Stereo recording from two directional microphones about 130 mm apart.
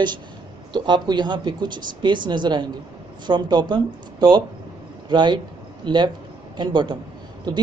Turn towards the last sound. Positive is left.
turn(degrees=-35)  # may be behind; listen again after turning